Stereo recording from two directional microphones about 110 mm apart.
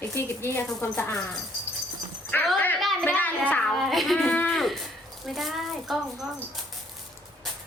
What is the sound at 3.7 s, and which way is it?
A woman's voice, centre (ahead or behind).